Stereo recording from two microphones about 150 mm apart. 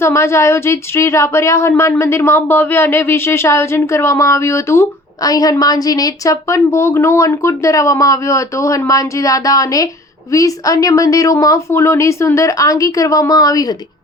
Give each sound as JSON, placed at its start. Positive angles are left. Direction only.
{"t": 0.0, "sound": "speech", "side_deg": 20}